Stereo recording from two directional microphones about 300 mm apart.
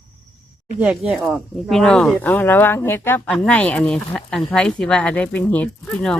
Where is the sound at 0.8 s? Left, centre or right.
Centre.